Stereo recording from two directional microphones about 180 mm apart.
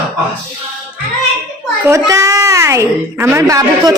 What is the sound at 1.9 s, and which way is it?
A woman's voice, 15° right (ahead or behind).